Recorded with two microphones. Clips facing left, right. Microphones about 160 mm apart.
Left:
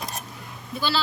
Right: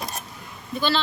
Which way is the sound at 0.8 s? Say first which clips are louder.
Right 2 dB; 5° left (ahead or behind).